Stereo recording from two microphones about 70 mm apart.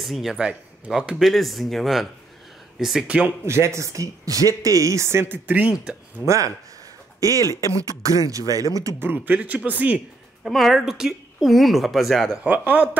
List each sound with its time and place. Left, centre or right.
0.0 s speech: centre
3.1 s speech: centre
3.4 s speech: right
5.5 s speech: right
6.2 s speech: right
9.0 s speech: right
10.4 s speech: centre
12.4 s speech: right